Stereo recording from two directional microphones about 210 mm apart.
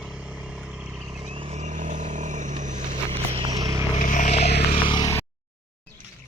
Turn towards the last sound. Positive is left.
turn(degrees=15)  # may be behind; listen again after turning